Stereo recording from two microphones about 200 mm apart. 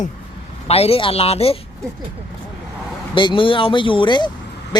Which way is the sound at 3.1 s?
25° left (ahead or behind).